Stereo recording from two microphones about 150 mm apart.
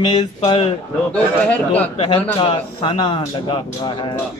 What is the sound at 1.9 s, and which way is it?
Speech, 35° left (ahead or behind).